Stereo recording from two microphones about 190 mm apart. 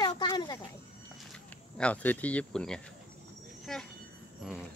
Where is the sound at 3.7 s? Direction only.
Centre (ahead or behind).